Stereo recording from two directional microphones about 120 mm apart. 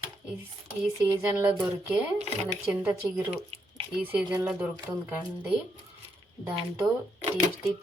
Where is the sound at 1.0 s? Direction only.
15° right (ahead or behind).